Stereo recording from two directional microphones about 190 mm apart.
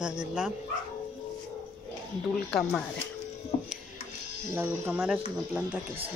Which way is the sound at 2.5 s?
5° left (ahead or behind).